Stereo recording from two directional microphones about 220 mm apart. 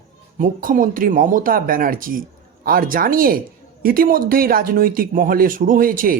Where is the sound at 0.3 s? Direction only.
40° right (ahead or behind).